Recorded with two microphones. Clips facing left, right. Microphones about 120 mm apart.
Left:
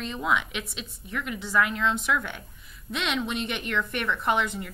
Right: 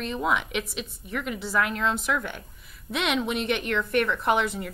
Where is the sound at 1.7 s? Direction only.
45° right (ahead or behind).